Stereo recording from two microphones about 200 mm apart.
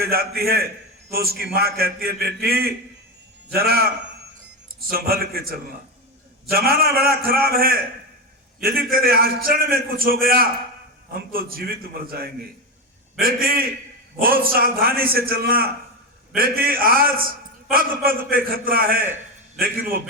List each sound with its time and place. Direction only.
0.0 s a man's voice: 50° right (ahead or behind)